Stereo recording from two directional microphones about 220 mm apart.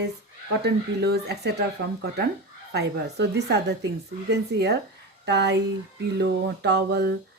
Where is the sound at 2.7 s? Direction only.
50° right (ahead or behind).